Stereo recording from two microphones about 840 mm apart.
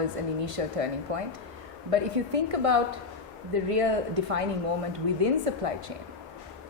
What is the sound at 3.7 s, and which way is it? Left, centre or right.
Speech, right.